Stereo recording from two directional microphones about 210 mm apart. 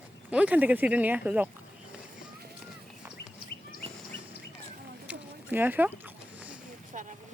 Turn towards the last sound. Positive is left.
turn(degrees=-35)  # may be behind; listen again after turning